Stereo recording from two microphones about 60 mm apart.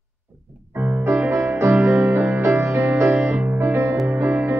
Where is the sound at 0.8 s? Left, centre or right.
Right.